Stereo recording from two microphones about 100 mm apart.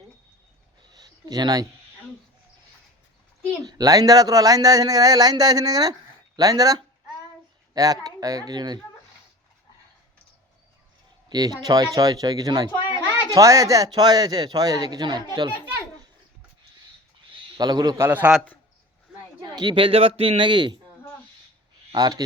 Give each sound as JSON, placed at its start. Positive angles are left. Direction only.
{"t": 0.9, "sound": "a sound", "side_deg": -40}
{"t": 3.6, "sound": "speech", "side_deg": -40}
{"t": 11.3, "sound": "speech", "side_deg": -40}
{"t": 17.6, "sound": "a man's voice", "side_deg": -45}
{"t": 17.9, "sound": "a man's voice", "side_deg": -20}
{"t": 19.4, "sound": "speech", "side_deg": -45}
{"t": 21.9, "sound": "speech", "side_deg": -40}